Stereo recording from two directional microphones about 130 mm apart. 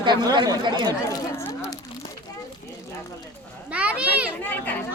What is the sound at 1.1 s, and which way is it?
Speech, 25° left (ahead or behind).